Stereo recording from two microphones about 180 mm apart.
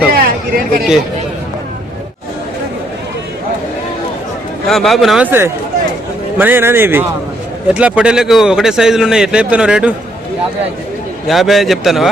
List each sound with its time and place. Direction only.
0.1 s a sound: 55° right (ahead or behind)
4.6 s a man's voice: centre (ahead or behind)
11.3 s a man's voice: centre (ahead or behind)